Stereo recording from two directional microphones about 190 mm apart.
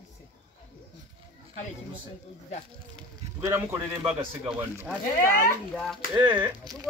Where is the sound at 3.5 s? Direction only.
15° right (ahead or behind).